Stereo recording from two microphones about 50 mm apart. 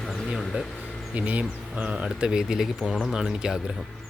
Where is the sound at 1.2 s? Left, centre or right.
Right.